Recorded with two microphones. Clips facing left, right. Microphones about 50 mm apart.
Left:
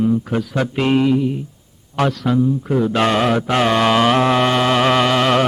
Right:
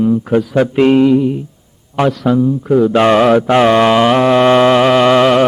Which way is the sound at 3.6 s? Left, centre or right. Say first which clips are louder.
Right 2 dB; centre.